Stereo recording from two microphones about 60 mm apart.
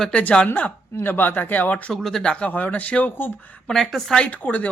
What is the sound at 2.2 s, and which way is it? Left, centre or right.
Speech, centre.